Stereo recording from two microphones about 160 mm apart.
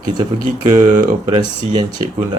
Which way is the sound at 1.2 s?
30° right (ahead or behind).